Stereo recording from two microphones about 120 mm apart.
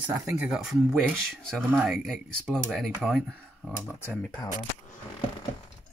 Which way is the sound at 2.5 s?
Centre (ahead or behind).